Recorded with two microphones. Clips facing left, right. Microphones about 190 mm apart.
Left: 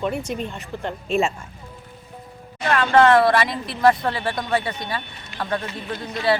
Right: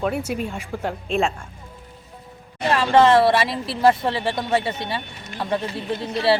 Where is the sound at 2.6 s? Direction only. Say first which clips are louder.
Even; 30° right (ahead or behind).